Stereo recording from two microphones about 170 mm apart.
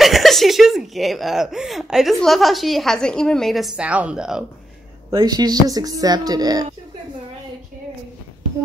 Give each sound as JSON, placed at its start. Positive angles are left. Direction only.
{"t": 0.0, "sound": "speech", "side_deg": 0}
{"t": 5.1, "sound": "speech", "side_deg": -25}